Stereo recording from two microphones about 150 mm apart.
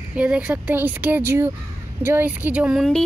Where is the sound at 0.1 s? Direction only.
10° right (ahead or behind).